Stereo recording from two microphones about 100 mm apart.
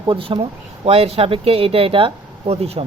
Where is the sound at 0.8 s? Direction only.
85° right.